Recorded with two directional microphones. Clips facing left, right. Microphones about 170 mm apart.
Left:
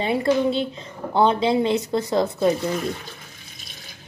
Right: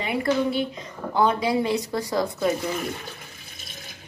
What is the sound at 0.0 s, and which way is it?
A woman's voice, 25° left (ahead or behind).